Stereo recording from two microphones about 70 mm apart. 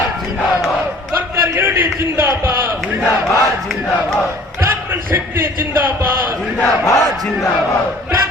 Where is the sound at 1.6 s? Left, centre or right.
Right.